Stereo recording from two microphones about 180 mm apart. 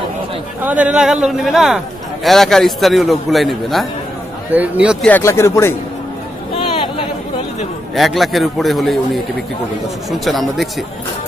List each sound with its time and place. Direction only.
0.6 s a man's voice: 10° right (ahead or behind)
5.0 s speech: 10° left (ahead or behind)
6.5 s a sound: 30° left (ahead or behind)
7.9 s a man's voice: centre (ahead or behind)